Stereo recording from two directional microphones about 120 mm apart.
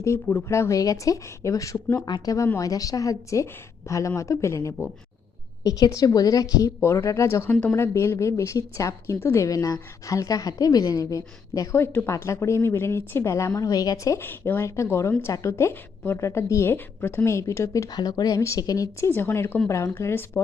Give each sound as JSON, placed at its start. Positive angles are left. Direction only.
{"t": 0.0, "sound": "a woman's voice", "side_deg": 20}